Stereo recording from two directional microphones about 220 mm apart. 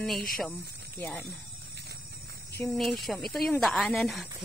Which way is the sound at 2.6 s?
5° left (ahead or behind).